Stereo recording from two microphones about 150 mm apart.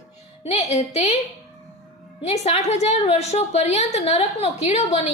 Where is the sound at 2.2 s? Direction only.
45° left (ahead or behind).